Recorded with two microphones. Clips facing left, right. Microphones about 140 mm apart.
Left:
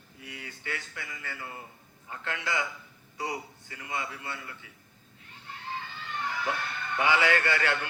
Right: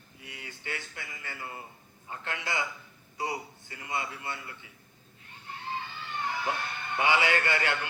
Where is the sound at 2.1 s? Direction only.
25° right (ahead or behind).